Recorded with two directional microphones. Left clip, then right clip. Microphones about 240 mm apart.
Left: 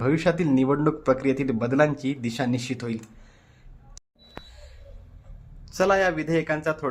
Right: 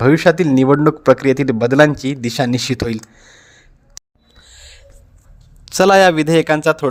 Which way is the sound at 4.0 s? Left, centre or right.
Right.